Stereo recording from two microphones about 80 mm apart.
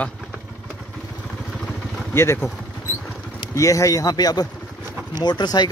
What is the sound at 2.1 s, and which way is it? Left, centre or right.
Speech, left.